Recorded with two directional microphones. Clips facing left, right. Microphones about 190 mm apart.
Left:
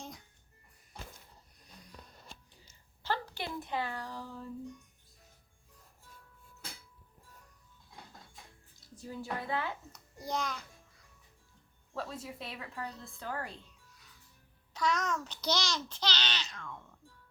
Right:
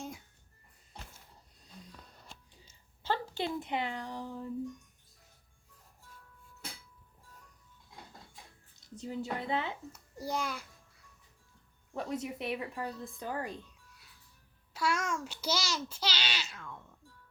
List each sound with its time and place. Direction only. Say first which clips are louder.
3.0 s a woman's voice: right 3 dB; 20° right (ahead or behind)
8.8 s speech: right 5 dB; 20° right (ahead or behind)
9.9 s a child's voice: right 1 dB; 5° right (ahead or behind)
11.9 s a child's voice: right 4 dB; 20° right (ahead or behind)
14.7 s a child's voice: left 1 dB; 10° right (ahead or behind)